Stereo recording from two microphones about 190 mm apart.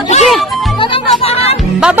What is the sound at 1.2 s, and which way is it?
Music, 30° left (ahead or behind).